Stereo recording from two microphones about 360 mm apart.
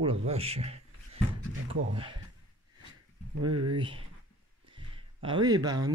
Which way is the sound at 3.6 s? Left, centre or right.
Centre.